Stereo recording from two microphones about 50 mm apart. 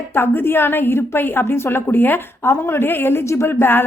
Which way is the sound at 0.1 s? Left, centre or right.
Left.